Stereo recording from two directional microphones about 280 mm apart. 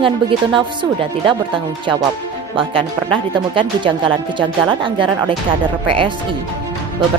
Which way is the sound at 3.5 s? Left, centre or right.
Centre.